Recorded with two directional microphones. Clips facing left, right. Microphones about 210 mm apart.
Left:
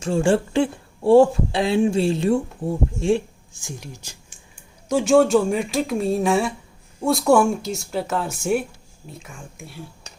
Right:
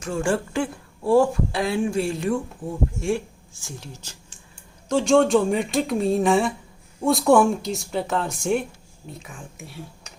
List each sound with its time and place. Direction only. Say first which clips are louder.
0.0 s speech: left 5 dB; 25° left (ahead or behind); by 9.8 s centre (ahead or behind)